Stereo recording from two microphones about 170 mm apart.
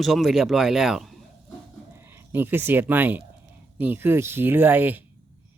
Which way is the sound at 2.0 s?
15° right (ahead or behind).